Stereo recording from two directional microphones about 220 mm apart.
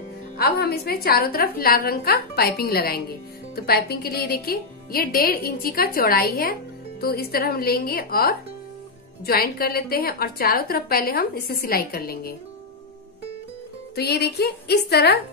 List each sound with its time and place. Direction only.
0.4 s a woman's voice: 45° left (ahead or behind)
13.9 s a woman's voice: 45° left (ahead or behind)